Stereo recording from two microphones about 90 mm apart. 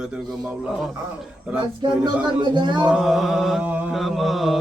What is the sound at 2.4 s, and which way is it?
Speech, 60° right (ahead or behind).